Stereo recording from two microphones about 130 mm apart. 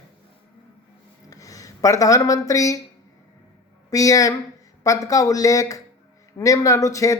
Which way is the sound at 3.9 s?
25° left (ahead or behind).